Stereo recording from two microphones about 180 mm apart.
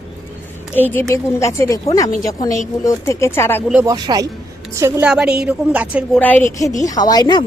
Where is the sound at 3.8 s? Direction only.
20° right (ahead or behind).